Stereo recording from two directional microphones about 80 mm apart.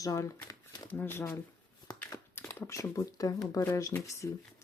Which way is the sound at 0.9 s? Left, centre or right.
Left.